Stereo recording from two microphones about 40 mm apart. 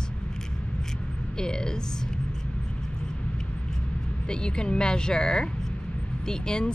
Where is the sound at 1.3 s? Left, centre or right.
Centre.